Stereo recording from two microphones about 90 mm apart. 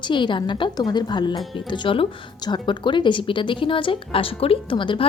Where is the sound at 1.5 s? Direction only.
65° left (ahead or behind).